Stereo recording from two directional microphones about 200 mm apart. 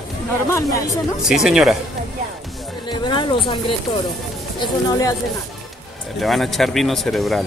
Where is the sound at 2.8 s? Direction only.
20° left (ahead or behind).